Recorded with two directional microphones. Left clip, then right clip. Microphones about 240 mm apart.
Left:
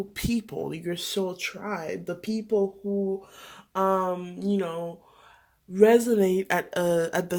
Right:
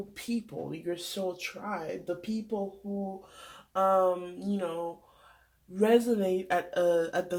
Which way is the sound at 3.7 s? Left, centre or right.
Left.